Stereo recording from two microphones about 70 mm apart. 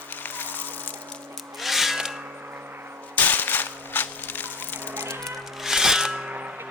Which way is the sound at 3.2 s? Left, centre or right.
Left.